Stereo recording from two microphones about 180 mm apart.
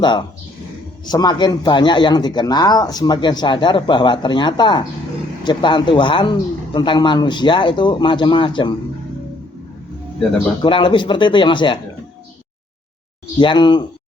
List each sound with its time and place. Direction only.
0.0 s speech: 25° left (ahead or behind)
10.3 s speech: 25° left (ahead or behind)
13.4 s speech: 25° left (ahead or behind)